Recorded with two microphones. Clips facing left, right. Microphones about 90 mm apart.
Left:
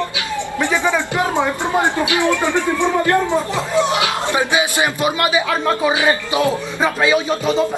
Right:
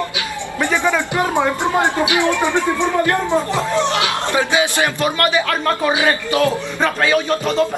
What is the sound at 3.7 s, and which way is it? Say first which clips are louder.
A woman's voice: left 4 dB; 15° left (ahead or behind).